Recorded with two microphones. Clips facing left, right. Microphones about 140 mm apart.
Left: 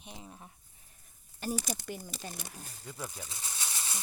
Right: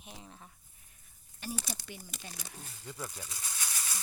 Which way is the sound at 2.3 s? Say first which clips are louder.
Left 3 dB; 45° left (ahead or behind).